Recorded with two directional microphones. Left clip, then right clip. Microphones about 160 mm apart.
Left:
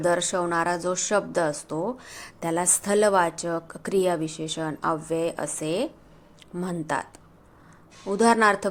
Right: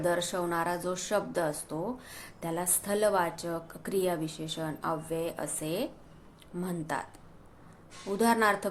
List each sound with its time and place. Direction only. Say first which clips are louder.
0.0 s speech: left 6 dB; 40° left (ahead or behind)